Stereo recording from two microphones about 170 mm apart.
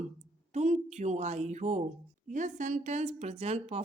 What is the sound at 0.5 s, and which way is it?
A woman's voice, 45° right (ahead or behind).